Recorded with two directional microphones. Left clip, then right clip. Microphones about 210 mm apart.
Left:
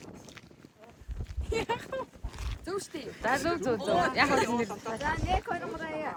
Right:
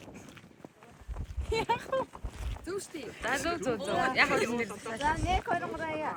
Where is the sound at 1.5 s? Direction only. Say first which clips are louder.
Right 2 dB; 25° right (ahead or behind).